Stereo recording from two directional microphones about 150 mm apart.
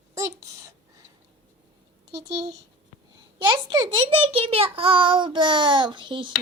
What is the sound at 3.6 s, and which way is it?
A child's voice, 30° right (ahead or behind).